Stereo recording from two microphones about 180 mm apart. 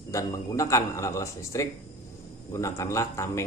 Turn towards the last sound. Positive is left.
turn(degrees=15)  # may be behind; listen again after turning